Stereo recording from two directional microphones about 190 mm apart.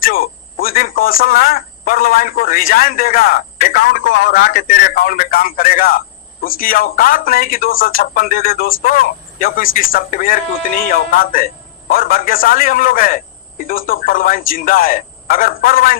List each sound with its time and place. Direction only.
0.0 s speech: 50° left (ahead or behind)